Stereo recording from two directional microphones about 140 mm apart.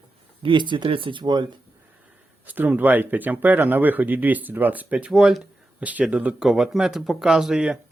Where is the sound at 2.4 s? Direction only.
10° right (ahead or behind).